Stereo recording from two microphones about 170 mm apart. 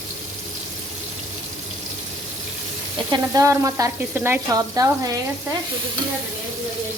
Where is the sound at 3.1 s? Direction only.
20° right (ahead or behind).